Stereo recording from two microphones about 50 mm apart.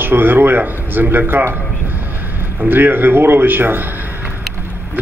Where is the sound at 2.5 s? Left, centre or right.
Right.